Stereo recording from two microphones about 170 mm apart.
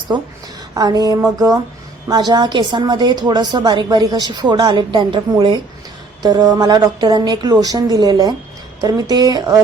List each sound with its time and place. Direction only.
0.7 s a woman's voice: 25° right (ahead or behind)